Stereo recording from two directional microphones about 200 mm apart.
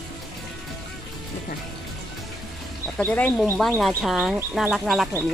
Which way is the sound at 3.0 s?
5° left (ahead or behind).